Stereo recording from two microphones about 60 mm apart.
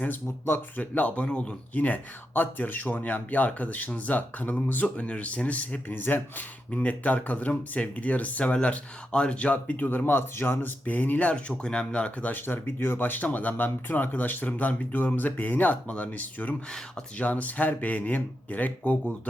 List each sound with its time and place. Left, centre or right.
0.0 s speech: left
0.8 s speech: left
1.7 s speech: left
12.3 s speech: left